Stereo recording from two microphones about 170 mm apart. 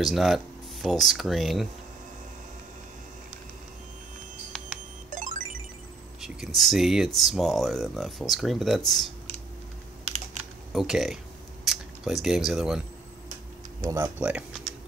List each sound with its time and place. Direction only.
0.0 s speech: centre (ahead or behind)
5.1 s music: 50° right (ahead or behind)
6.2 s speech: centre (ahead or behind)
10.7 s speech: centre (ahead or behind)
13.7 s speech: 20° right (ahead or behind)